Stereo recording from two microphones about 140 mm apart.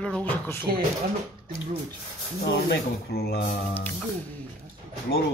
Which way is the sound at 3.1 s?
90° left.